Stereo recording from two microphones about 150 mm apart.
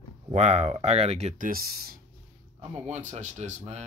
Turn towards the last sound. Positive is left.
turn(degrees=-50)  # may be behind; listen again after turning